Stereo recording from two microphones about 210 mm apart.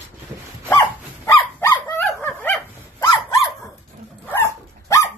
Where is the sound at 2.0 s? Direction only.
5° left (ahead or behind).